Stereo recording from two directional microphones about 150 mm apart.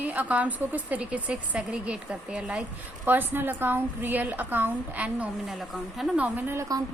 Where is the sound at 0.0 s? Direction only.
10° right (ahead or behind).